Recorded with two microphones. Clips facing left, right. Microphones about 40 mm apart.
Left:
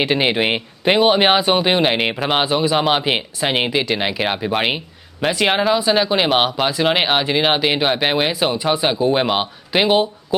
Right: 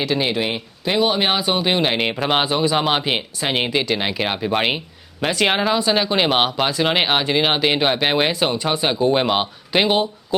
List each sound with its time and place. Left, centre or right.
0.0 s speech: left
1.9 s speech: centre